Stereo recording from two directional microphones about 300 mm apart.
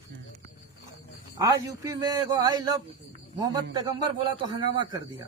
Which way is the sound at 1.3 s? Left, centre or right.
Centre.